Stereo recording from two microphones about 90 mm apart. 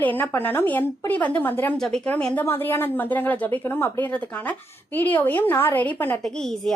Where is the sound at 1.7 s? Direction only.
5° left (ahead or behind).